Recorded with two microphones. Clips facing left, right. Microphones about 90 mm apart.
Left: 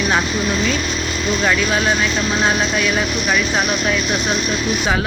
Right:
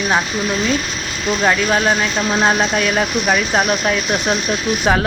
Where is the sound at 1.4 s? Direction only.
40° right (ahead or behind).